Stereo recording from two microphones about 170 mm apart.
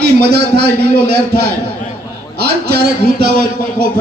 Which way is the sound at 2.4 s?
70° right (ahead or behind).